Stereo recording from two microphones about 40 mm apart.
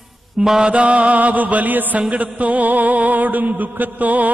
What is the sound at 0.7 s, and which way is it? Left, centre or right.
Mantra, right.